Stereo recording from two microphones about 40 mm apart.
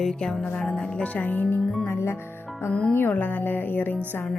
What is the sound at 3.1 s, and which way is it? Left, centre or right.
Music, left.